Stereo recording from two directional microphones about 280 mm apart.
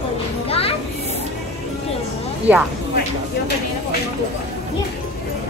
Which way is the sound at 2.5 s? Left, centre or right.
Centre.